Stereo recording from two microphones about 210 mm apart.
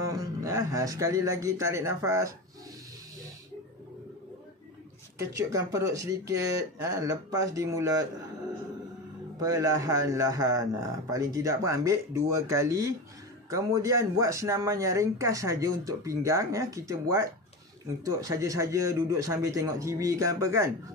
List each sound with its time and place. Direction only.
0.0 s a man's voice: 15° right (ahead or behind)
5.3 s speech: 15° right (ahead or behind)
9.4 s speech: 15° right (ahead or behind)
18.2 s speech: 15° right (ahead or behind)